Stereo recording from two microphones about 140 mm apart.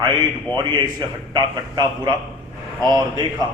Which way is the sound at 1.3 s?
30° right (ahead or behind).